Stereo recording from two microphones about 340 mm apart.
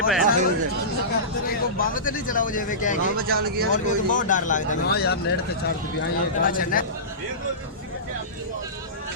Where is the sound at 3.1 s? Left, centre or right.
Right.